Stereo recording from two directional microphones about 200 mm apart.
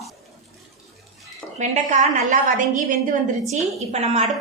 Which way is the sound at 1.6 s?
35° right (ahead or behind).